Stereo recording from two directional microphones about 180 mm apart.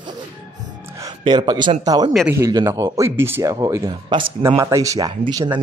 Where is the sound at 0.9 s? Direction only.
20° right (ahead or behind).